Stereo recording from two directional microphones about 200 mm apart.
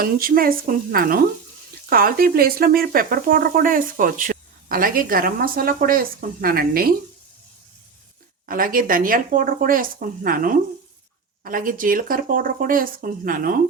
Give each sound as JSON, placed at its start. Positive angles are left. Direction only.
{"t": 0.0, "sound": "speech", "side_deg": -45}
{"t": 8.4, "sound": "speech", "side_deg": -45}